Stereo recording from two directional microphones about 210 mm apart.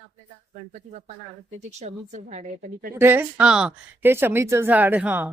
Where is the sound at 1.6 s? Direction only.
30° right (ahead or behind).